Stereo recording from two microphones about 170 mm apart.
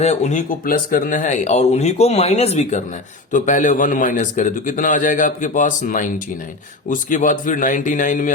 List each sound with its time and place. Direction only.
0.0 s a man's voice: 40° left (ahead or behind)